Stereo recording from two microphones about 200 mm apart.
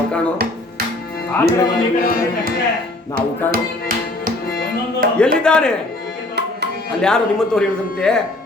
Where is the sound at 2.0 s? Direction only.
45° left (ahead or behind).